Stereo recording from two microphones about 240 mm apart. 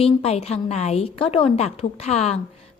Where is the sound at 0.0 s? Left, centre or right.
Left.